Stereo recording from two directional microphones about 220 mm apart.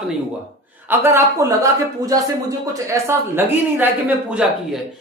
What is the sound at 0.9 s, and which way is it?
A man's voice, 10° right (ahead or behind).